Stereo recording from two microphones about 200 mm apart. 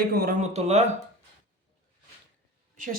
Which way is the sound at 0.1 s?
50° right (ahead or behind).